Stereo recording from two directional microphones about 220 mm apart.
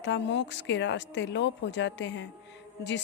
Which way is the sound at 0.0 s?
55° left (ahead or behind).